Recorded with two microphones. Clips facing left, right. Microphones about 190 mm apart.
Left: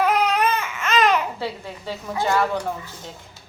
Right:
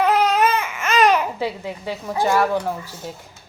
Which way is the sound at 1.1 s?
15° right (ahead or behind).